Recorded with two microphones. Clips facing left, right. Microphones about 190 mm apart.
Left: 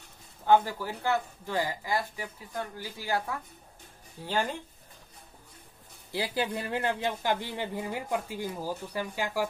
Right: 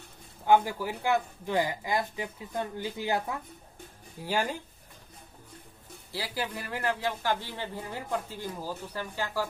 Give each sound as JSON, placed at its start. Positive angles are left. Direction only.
{"t": 0.5, "sound": "speech", "side_deg": -15}
{"t": 6.1, "sound": "speech", "side_deg": 20}